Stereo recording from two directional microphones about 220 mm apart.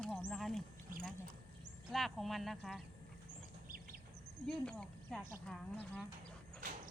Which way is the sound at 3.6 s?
40° right (ahead or behind).